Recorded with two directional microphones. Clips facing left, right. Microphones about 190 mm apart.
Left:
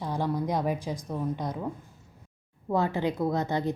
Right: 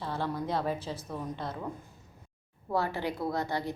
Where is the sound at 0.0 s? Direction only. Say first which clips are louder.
Left 4 dB; 15° left (ahead or behind).